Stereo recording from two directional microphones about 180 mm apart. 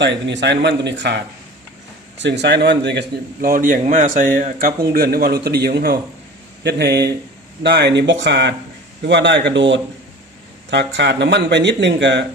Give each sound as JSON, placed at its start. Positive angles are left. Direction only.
{"t": 0.0, "sound": "a man's voice", "side_deg": -75}
{"t": 10.7, "sound": "speech", "side_deg": -70}